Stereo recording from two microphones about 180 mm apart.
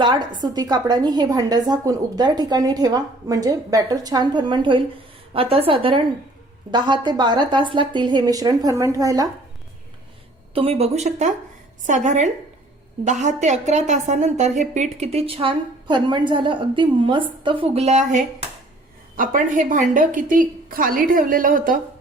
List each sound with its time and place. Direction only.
0.0 s a woman's voice: 25° right (ahead or behind)
10.5 s a woman's voice: 30° right (ahead or behind); by 21.8 s 50° right (ahead or behind)